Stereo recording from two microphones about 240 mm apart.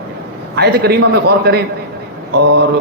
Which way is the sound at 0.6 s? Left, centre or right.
Right.